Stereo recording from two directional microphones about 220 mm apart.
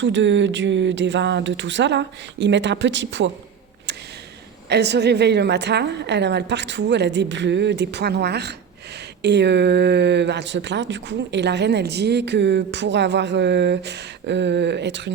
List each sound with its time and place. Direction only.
0.0 s speech: 55° right (ahead or behind)
4.7 s speech: 50° right (ahead or behind)